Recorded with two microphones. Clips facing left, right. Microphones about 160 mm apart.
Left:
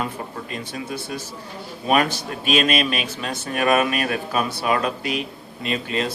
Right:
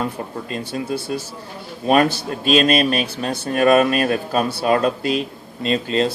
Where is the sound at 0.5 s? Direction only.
30° right (ahead or behind).